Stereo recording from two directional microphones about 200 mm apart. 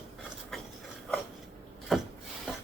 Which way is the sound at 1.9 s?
Centre (ahead or behind).